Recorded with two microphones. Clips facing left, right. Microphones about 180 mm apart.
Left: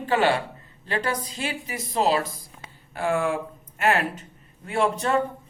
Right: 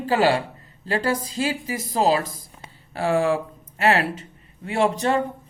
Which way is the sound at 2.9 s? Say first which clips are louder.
Right 4 dB; 35° right (ahead or behind).